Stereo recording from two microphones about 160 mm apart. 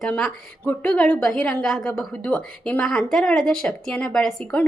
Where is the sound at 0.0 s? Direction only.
10° left (ahead or behind).